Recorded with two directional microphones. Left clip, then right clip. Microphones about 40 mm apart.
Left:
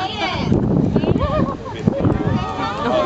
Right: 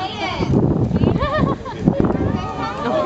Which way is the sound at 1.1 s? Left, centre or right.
Left.